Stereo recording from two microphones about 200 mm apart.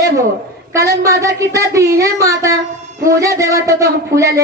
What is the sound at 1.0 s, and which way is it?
Speech, 15° right (ahead or behind).